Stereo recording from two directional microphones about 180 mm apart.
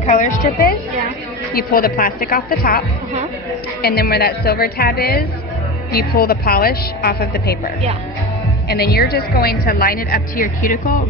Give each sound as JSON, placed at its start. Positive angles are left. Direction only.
{"t": 0.0, "sound": "a woman's voice", "side_deg": 45}
{"t": 3.8, "sound": "speech", "side_deg": 60}